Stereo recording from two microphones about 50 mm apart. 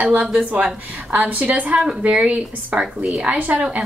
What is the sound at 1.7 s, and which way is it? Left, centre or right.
Speech, centre.